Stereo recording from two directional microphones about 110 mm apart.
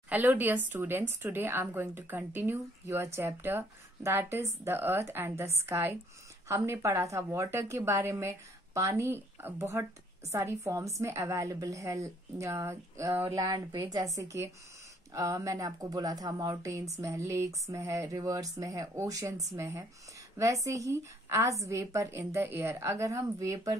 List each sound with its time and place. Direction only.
0.1 s speech: 15° right (ahead or behind); by 23.8 s 30° right (ahead or behind)